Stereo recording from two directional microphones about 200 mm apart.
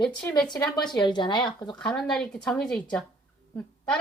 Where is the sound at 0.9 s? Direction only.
20° left (ahead or behind).